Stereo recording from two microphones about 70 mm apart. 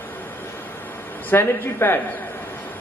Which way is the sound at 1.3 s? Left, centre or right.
Left.